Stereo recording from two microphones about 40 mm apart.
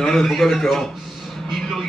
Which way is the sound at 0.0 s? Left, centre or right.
Centre.